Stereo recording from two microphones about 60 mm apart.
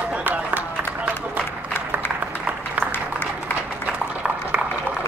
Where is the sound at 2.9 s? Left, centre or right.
Left.